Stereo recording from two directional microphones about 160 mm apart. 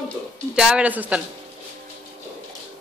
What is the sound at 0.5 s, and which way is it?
Speech, 5° right (ahead or behind).